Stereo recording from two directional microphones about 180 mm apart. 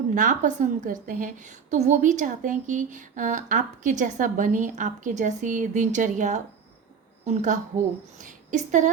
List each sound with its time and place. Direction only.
0.1 s a woman's voice: 45° right (ahead or behind)